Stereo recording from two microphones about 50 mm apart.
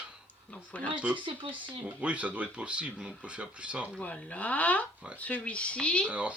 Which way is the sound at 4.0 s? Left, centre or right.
Left.